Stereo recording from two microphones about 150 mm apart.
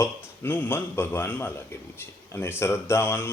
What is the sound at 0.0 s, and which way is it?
A man's voice, 15° left (ahead or behind).